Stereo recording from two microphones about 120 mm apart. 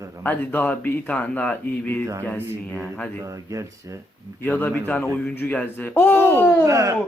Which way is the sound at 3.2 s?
25° right (ahead or behind).